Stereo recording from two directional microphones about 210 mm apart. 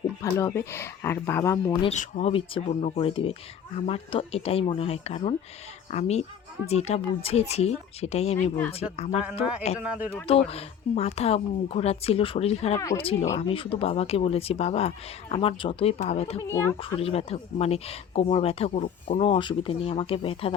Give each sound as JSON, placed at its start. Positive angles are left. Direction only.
{"t": 0.2, "sound": "speech", "side_deg": 15}
{"t": 1.8, "sound": "speech", "side_deg": 35}
{"t": 9.8, "sound": "speech", "side_deg": -5}
{"t": 10.2, "sound": "speech", "side_deg": 30}